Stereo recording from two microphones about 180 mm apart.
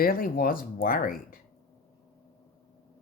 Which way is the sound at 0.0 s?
55° left (ahead or behind).